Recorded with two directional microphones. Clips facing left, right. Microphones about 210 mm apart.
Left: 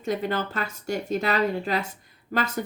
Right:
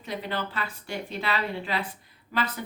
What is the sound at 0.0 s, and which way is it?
A woman's voice, 45° left (ahead or behind).